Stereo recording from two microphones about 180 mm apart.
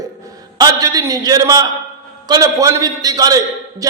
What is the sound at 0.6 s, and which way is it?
A man's voice, 20° right (ahead or behind).